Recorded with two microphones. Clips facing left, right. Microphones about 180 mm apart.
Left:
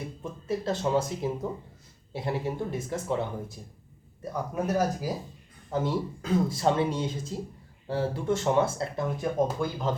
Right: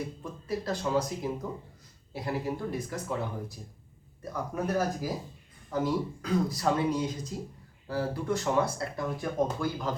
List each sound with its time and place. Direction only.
0.2 s speech: 25° left (ahead or behind)
5.7 s speech: 25° left (ahead or behind)